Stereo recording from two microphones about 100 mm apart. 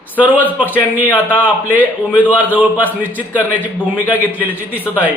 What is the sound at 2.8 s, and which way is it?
A man's voice, 15° left (ahead or behind).